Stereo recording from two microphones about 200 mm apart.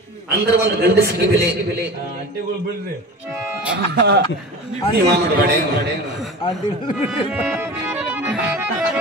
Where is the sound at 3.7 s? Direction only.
55° right (ahead or behind).